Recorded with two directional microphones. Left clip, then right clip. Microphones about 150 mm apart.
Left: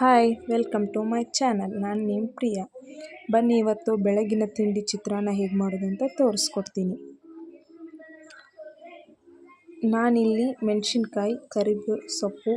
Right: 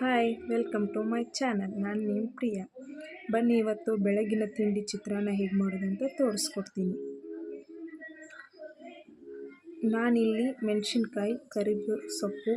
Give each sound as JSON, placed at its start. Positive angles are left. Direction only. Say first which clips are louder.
{"t": 0.0, "sound": "speech", "louder": "left 9 dB", "side_deg": 30}
{"t": 9.8, "sound": "speech", "louder": "left 5 dB", "side_deg": 25}